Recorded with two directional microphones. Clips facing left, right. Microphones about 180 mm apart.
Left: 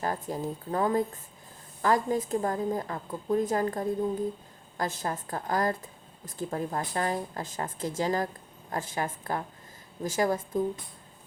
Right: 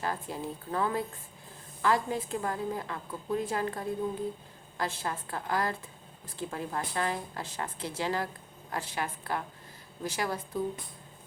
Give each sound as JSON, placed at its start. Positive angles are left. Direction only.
{"t": 0.0, "sound": "a woman's voice", "side_deg": 45}